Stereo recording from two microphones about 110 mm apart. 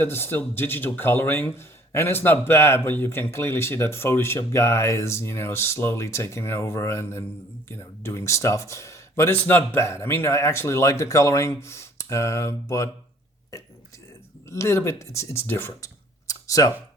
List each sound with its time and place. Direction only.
0.0 s speech: 20° left (ahead or behind)
14.5 s speech: 25° left (ahead or behind)
15.8 s a sound: 30° left (ahead or behind)